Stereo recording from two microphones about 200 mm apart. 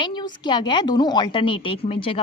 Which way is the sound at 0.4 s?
20° left (ahead or behind).